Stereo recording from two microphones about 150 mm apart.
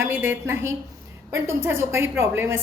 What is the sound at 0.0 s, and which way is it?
A woman's voice, 15° right (ahead or behind).